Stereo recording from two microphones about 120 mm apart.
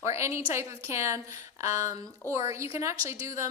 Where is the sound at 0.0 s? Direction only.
25° right (ahead or behind).